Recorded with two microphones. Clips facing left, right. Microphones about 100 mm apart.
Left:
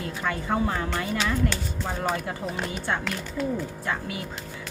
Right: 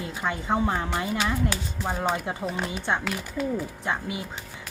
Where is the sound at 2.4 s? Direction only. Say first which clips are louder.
Right 1 dB; centre (ahead or behind).